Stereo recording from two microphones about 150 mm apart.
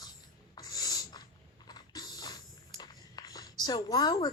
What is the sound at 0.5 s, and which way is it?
Writing, 25° left (ahead or behind).